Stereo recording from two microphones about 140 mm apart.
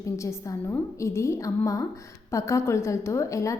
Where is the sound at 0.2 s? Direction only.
20° left (ahead or behind).